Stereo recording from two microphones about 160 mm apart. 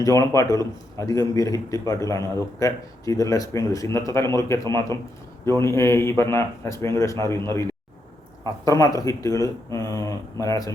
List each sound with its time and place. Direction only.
0.0 s a man's voice: 20° left (ahead or behind)